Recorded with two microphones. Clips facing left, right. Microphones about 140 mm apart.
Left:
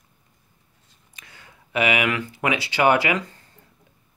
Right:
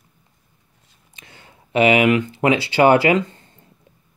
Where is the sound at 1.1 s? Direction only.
25° right (ahead or behind).